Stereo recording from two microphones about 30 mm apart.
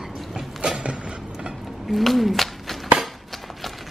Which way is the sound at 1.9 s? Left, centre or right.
Centre.